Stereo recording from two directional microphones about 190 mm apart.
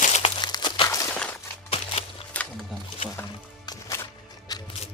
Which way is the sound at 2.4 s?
5° left (ahead or behind).